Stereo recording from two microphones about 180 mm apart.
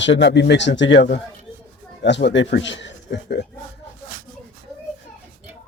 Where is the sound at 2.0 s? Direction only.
80° left.